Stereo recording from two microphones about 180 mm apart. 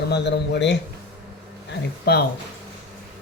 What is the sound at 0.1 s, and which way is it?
Speech, 70° left (ahead or behind).